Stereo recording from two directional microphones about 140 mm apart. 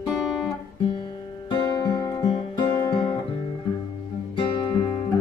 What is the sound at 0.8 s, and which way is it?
Music, 35° left (ahead or behind).